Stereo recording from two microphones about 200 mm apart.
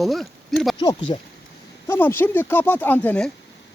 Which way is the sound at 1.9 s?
10° left (ahead or behind).